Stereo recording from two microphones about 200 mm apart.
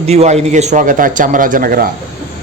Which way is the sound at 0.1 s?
30° right (ahead or behind).